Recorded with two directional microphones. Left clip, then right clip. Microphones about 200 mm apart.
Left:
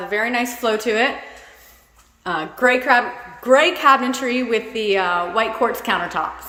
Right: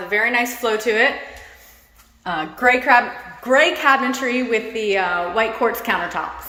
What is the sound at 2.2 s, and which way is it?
A woman's voice, 25° left (ahead or behind).